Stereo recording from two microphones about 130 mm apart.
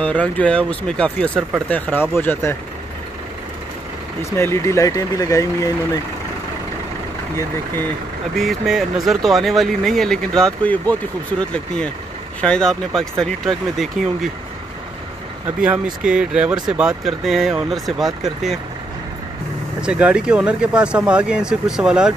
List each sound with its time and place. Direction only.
0.0 s speech: 10° left (ahead or behind)
4.2 s speech: 20° left (ahead or behind)
7.3 s speech: 15° left (ahead or behind)
8.4 s speech: centre (ahead or behind)
15.4 s speech: 10° right (ahead or behind)
19.8 s speech: 10° right (ahead or behind)